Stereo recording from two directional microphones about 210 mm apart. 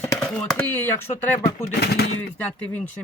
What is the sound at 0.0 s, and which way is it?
Speech, 5° left (ahead or behind).